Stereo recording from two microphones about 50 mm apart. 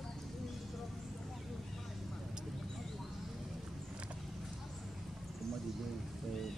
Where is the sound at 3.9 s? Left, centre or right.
Right.